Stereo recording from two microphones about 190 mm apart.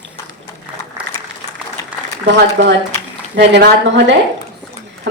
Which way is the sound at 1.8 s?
15° left (ahead or behind).